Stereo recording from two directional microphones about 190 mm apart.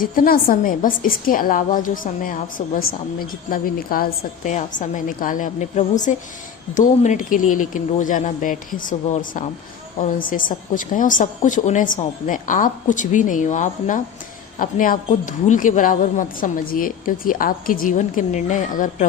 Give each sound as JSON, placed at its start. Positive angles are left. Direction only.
{"t": 0.0, "sound": "a woman's voice", "side_deg": 50}